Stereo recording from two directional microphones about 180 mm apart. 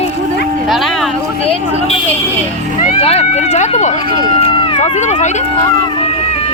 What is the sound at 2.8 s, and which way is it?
Speech, 35° left (ahead or behind).